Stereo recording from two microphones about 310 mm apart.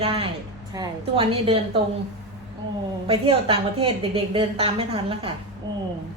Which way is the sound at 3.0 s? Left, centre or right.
Centre.